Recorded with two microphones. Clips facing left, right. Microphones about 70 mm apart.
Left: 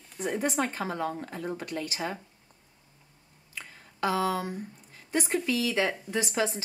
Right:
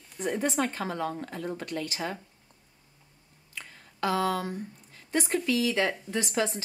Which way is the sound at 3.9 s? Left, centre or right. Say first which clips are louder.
Even; centre.